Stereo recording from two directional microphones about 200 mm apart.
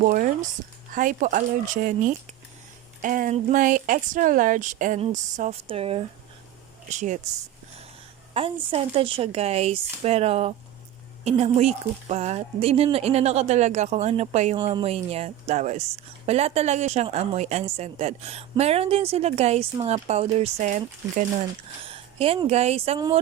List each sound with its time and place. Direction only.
0.0 s a woman's voice: 40° right (ahead or behind)
8.3 s a woman's voice: 30° right (ahead or behind)
21.8 s a woman's voice: 25° right (ahead or behind)
23.0 s speech: 20° right (ahead or behind)